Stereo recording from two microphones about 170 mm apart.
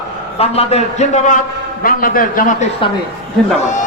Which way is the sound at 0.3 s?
35° left (ahead or behind).